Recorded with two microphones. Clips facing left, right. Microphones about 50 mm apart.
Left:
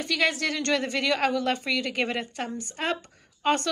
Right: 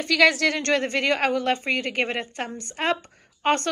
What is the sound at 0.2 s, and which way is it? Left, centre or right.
Speech, right.